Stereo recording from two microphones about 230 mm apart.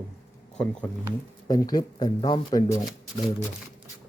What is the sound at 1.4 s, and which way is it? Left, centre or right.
Speech, centre.